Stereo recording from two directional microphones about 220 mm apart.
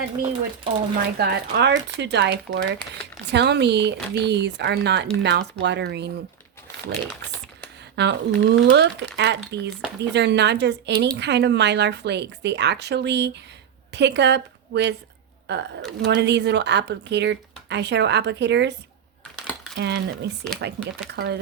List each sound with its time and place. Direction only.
0.2 s speech: 35° right (ahead or behind)
8.0 s a woman's voice: 50° right (ahead or behind)
19.7 s speech: 50° right (ahead or behind)